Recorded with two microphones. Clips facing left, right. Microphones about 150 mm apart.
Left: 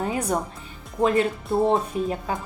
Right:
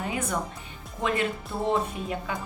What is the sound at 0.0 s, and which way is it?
Speech, 35° left (ahead or behind).